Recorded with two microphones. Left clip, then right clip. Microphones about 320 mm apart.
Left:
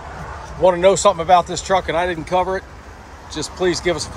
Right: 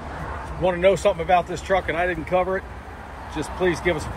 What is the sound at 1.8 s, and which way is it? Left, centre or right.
Speech, left.